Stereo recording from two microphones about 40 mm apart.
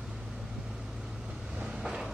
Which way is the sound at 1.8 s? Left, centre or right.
Centre.